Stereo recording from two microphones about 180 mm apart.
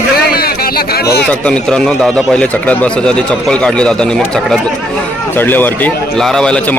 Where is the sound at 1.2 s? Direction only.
5° left (ahead or behind).